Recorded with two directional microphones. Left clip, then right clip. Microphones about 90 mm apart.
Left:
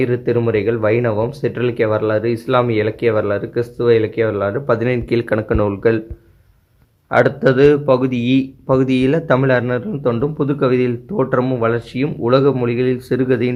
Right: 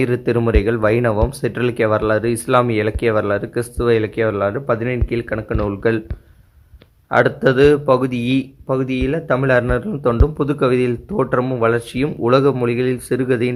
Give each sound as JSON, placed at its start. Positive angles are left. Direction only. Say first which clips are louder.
{"t": 0.0, "sound": "speech", "louder": "left 1 dB", "side_deg": -45}
{"t": 4.6, "sound": "speech", "louder": "left 3 dB", "side_deg": -15}
{"t": 5.6, "sound": "speech", "louder": "even", "side_deg": -25}
{"t": 7.1, "sound": "speech", "louder": "left 1 dB", "side_deg": -25}
{"t": 8.6, "sound": "speech", "louder": "left 6 dB", "side_deg": -5}
{"t": 9.5, "sound": "speech", "louder": "right 1 dB", "side_deg": -35}
{"t": 11.7, "sound": "speech", "louder": "right 1 dB", "side_deg": -40}